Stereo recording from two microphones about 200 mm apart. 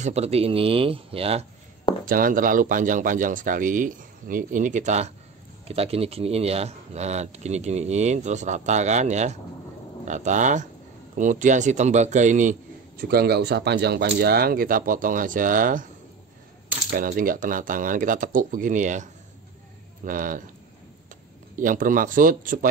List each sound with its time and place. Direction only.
0.0 s speech: 30° right (ahead or behind)
2.0 s a man's voice: 45° right (ahead or behind)
16.9 s speech: 45° right (ahead or behind)
20.1 s a man's voice: 40° right (ahead or behind)
21.5 s a man's voice: 40° right (ahead or behind)